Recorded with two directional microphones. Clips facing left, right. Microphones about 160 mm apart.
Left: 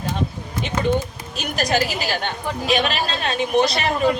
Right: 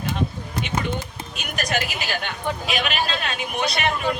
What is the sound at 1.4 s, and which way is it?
A woman's voice, 35° left (ahead or behind).